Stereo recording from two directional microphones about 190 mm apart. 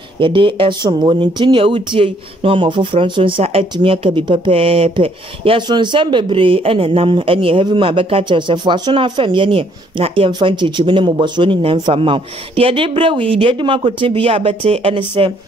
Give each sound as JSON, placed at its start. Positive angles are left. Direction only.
{"t": 0.2, "sound": "speech", "side_deg": -25}